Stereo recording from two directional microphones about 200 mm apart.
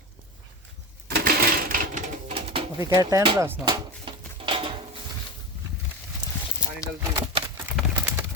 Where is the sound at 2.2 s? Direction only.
30° right (ahead or behind).